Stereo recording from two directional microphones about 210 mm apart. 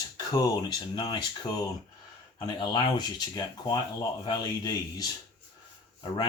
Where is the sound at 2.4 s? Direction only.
20° left (ahead or behind).